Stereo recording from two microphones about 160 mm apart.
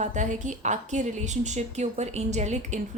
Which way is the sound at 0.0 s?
50° right (ahead or behind).